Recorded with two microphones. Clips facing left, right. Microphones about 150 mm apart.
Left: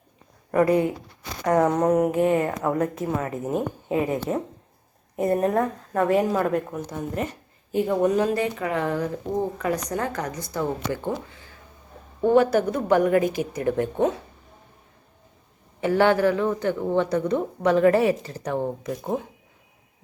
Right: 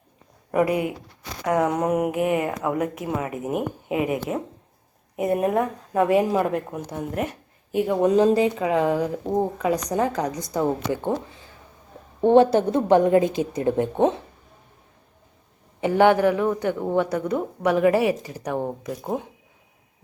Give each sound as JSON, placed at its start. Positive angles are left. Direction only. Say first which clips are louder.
{"t": 0.5, "sound": "speech", "louder": "left 2 dB", "side_deg": -10}
{"t": 8.0, "sound": "speech", "louder": "right 8 dB", "side_deg": -20}
{"t": 15.8, "sound": "speech", "louder": "right 2 dB", "side_deg": -15}